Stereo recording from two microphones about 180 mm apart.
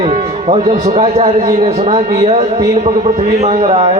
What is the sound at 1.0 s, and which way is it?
A man's voice, 35° right (ahead or behind).